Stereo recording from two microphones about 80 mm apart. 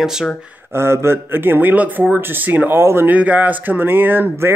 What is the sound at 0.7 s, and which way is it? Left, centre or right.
Speech, right.